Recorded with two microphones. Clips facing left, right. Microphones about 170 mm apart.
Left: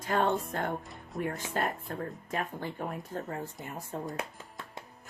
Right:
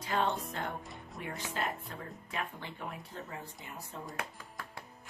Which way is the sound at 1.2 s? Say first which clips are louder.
Left 6 dB; 50° left (ahead or behind).